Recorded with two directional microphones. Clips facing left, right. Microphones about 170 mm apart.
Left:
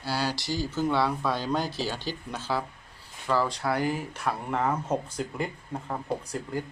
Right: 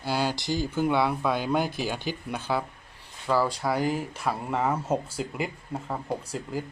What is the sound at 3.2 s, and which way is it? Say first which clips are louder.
Speech: right 1 dB; 10° right (ahead or behind).